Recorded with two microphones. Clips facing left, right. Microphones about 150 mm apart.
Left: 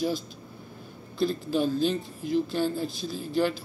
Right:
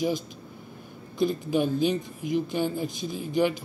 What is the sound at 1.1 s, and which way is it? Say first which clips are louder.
A woman's voice: right 2 dB; 15° right (ahead or behind).